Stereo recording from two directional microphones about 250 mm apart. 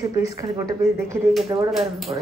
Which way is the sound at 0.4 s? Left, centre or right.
Centre.